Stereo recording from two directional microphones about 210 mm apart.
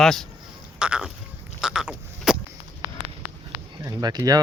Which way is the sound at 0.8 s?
5° right (ahead or behind).